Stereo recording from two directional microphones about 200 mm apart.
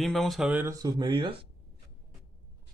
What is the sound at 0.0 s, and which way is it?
Speech, centre (ahead or behind).